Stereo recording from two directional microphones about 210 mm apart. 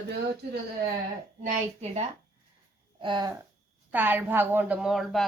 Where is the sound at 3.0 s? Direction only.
20° right (ahead or behind).